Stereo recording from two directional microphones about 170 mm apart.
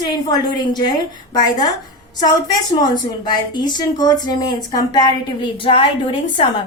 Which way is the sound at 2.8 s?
25° left (ahead or behind).